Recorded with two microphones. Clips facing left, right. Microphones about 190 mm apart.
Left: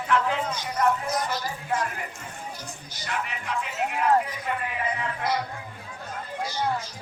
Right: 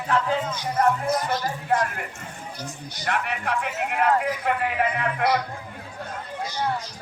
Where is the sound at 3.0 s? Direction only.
60° right (ahead or behind).